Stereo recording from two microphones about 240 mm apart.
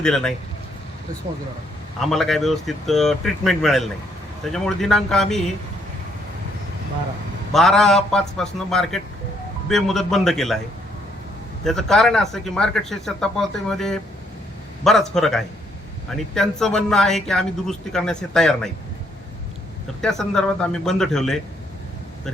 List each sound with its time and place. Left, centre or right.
0.0 s speech: centre
2.0 s speech: centre
7.5 s speech: centre
11.6 s speech: centre
20.0 s speech: centre